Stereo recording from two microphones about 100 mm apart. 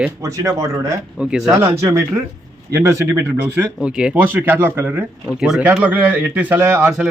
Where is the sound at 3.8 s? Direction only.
10° right (ahead or behind).